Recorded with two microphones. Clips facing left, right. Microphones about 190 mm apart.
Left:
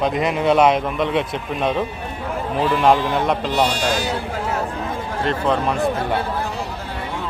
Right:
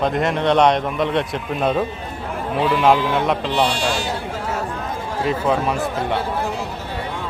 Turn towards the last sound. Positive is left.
turn(degrees=-5)  # may be behind; listen again after turning